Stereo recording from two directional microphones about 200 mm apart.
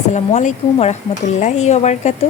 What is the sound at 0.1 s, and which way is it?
Speech, 35° left (ahead or behind).